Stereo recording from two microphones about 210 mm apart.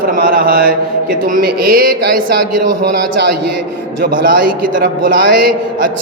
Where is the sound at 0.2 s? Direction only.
45° right (ahead or behind).